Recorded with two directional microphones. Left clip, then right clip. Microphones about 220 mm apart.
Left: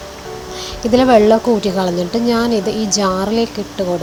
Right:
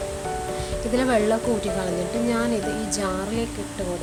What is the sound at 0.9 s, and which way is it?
Speech, 15° left (ahead or behind).